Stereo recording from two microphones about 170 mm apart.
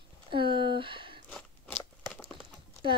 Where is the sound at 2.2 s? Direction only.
30° right (ahead or behind).